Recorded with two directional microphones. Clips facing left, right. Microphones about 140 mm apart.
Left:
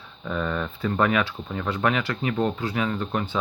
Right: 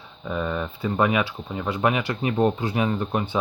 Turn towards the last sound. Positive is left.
turn(degrees=-20)  # may be behind; listen again after turning